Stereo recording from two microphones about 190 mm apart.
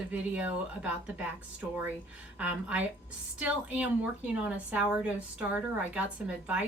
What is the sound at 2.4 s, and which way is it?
Speech, 5° right (ahead or behind).